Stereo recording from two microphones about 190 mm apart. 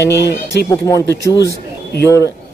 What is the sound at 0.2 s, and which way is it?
Speech, 65° left (ahead or behind).